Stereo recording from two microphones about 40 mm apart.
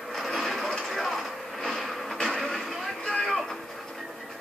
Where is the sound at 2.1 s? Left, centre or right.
Centre.